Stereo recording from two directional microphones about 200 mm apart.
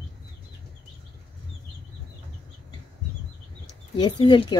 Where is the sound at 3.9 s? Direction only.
20° left (ahead or behind).